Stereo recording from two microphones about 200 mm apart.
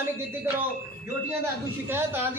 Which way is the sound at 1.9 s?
10° right (ahead or behind).